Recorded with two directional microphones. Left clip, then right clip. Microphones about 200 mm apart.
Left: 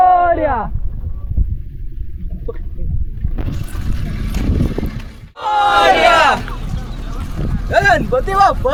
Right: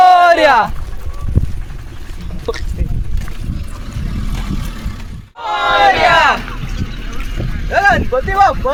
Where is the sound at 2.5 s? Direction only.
65° right (ahead or behind).